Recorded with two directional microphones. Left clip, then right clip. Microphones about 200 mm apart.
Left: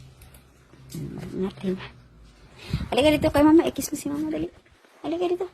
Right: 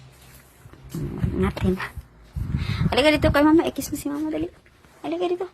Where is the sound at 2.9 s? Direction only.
10° left (ahead or behind).